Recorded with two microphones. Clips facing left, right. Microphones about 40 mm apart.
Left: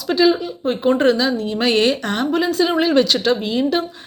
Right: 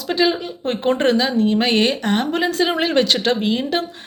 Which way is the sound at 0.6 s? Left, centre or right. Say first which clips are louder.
Left 2 dB; right.